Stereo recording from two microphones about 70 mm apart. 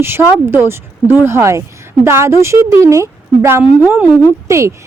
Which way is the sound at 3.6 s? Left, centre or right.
Right.